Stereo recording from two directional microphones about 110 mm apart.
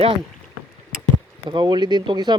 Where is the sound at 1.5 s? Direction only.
45° right (ahead or behind).